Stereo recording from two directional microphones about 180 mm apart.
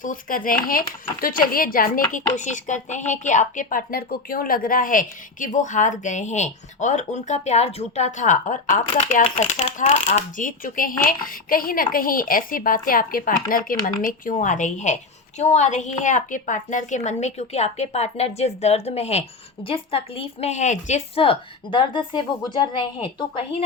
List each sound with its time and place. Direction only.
0.0 s a woman's voice: 50° left (ahead or behind); by 23.6 s 30° left (ahead or behind)